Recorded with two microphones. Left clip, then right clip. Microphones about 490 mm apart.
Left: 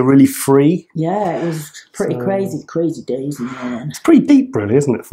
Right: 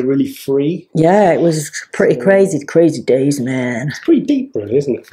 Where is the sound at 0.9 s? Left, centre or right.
Right.